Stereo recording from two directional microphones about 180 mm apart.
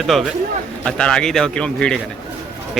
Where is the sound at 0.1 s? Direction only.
Centre (ahead or behind).